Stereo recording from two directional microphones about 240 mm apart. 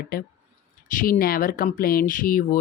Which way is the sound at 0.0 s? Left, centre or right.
Left.